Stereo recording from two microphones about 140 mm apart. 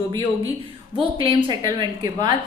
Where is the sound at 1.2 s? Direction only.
35° right (ahead or behind).